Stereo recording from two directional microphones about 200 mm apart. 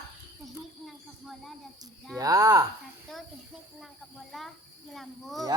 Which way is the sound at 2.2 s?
15° right (ahead or behind).